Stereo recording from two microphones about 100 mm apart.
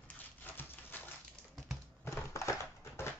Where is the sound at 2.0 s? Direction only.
30° left (ahead or behind).